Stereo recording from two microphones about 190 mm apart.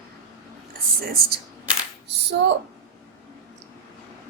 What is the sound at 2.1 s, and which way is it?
Speech, 65° right (ahead or behind).